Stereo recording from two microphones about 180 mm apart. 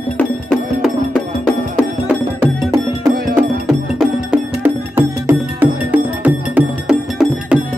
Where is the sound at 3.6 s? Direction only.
5° right (ahead or behind).